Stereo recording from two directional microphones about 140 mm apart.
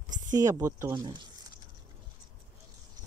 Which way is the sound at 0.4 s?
25° right (ahead or behind).